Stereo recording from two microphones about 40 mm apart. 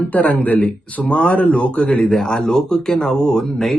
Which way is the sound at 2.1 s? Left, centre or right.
Centre.